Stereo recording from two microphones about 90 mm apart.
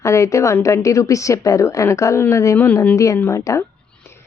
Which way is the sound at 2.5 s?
20° left (ahead or behind).